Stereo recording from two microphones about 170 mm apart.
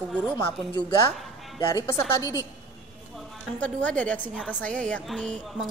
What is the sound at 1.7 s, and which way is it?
Speech, 20° left (ahead or behind).